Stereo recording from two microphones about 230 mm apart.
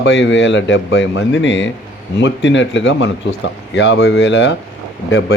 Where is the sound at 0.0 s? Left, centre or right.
Left.